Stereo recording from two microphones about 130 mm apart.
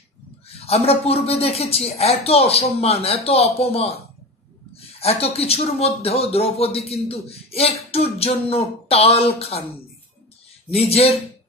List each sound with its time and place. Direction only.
0.6 s speech: 50° left (ahead or behind)
10.7 s speech: 50° left (ahead or behind)